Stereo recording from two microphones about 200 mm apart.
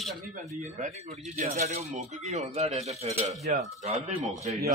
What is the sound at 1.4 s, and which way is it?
Speech, 35° right (ahead or behind).